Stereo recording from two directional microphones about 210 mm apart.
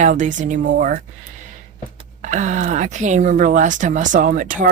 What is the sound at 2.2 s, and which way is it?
Speech, 35° right (ahead or behind).